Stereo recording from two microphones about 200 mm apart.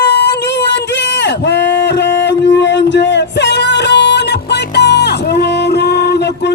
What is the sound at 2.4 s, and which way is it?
Music, 60° left (ahead or behind).